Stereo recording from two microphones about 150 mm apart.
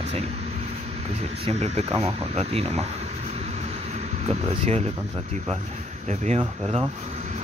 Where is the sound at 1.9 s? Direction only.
20° right (ahead or behind).